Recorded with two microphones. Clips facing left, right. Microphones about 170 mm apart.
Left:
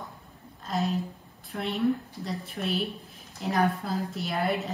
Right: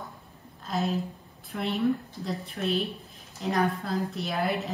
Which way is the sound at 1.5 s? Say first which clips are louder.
Even; centre (ahead or behind).